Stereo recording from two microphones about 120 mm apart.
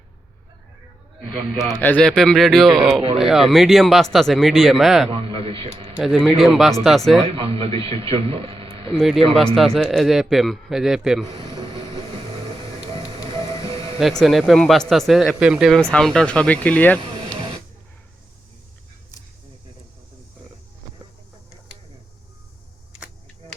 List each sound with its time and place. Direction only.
1.8 s speech: 15° left (ahead or behind)
2.0 s speech: 5° left (ahead or behind)
5.1 s a man's voice: 50° right (ahead or behind)
6.0 s speech: 5° left (ahead or behind)
7.3 s a man's voice: 50° right (ahead or behind)
9.0 s speech: centre (ahead or behind)
11.3 s vehicle: 45° right (ahead or behind)
13.2 s music: 50° right (ahead or behind)
14.0 s speech: centre (ahead or behind)
15.9 s speech: 5° left (ahead or behind)